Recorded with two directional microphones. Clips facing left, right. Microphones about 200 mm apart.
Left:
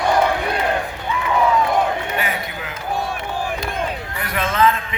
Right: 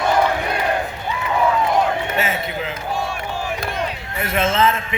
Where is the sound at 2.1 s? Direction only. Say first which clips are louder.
Right 2 dB; 25° right (ahead or behind).